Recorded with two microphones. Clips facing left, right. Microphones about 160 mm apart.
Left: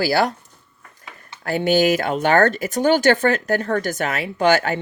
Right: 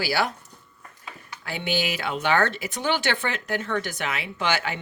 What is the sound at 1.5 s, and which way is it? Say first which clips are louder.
Speech: left 11 dB; 45° left (ahead or behind).